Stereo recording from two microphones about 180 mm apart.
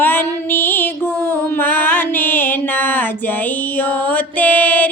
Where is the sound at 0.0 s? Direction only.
10° left (ahead or behind).